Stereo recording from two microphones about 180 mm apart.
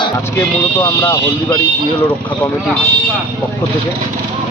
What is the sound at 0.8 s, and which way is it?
Speech, 15° left (ahead or behind).